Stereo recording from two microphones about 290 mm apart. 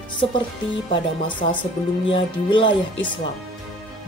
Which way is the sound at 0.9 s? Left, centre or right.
Centre.